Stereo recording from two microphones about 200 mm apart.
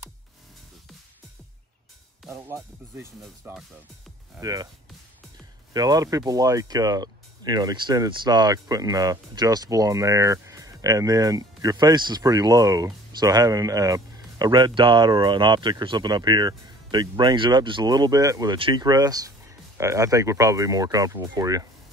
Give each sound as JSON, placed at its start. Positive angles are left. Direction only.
{"t": 2.3, "sound": "speech", "side_deg": -15}
{"t": 4.4, "sound": "speech", "side_deg": -15}
{"t": 5.7, "sound": "speech", "side_deg": -20}